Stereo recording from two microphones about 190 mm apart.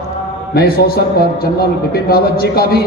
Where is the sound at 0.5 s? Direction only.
50° left (ahead or behind).